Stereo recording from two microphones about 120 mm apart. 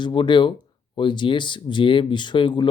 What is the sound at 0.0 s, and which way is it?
Speech, 40° left (ahead or behind).